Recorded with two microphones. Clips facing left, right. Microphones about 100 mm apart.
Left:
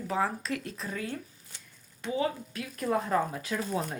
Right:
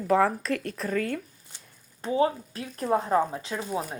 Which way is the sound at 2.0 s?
35° right (ahead or behind).